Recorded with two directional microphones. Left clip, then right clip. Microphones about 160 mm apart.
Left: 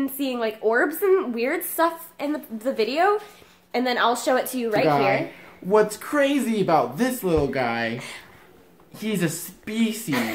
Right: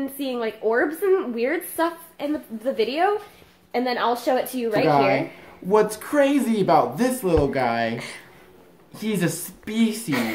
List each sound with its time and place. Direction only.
0.0 s a woman's voice: 15° left (ahead or behind)
5.7 s speech: centre (ahead or behind)
8.9 s speech: centre (ahead or behind)